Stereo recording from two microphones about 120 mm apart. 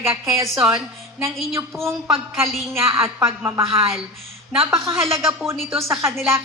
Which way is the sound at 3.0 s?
20° right (ahead or behind).